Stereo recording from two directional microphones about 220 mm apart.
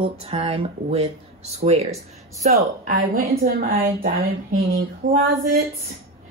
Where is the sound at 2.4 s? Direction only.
40° right (ahead or behind).